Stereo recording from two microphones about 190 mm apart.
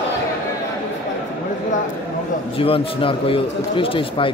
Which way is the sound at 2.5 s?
30° left (ahead or behind).